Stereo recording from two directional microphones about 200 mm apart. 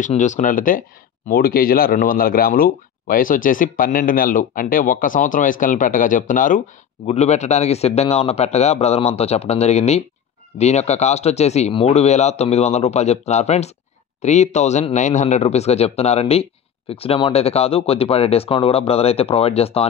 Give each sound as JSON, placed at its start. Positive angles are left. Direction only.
{"t": 0.0, "sound": "speech", "side_deg": 40}